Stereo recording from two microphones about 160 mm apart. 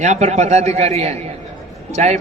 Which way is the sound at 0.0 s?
45° right (ahead or behind).